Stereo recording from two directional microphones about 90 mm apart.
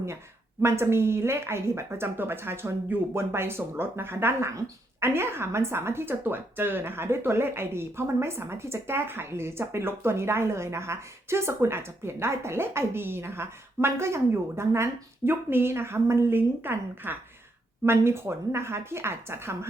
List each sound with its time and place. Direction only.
0.6 s speech: 30° right (ahead or behind)